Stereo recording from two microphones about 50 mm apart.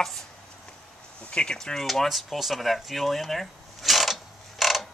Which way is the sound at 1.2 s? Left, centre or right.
Left.